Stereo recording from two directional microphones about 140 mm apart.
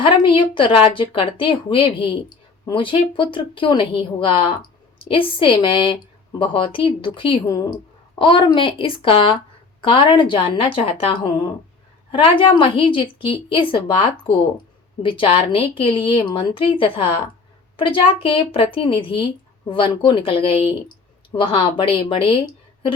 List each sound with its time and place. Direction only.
0.0 s a woman's voice: 40° left (ahead or behind)